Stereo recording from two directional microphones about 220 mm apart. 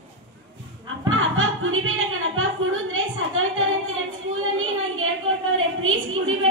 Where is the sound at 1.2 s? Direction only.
65° right (ahead or behind).